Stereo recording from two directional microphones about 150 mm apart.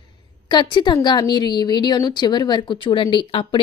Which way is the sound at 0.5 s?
30° left (ahead or behind).